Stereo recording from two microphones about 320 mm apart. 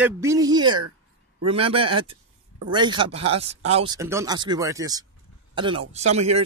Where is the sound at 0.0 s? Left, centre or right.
Centre.